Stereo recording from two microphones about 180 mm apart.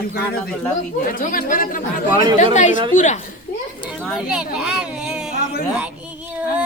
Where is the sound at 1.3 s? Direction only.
50° left (ahead or behind).